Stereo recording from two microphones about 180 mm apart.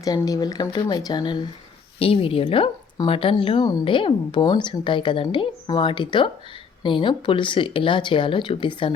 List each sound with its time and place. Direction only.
0.0 s speech: 20° left (ahead or behind)